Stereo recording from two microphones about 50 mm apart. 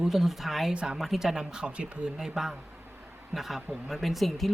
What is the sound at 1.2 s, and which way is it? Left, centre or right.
Speech, centre.